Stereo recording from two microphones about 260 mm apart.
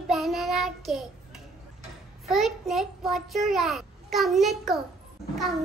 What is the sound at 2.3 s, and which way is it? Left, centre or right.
A child's voice, centre.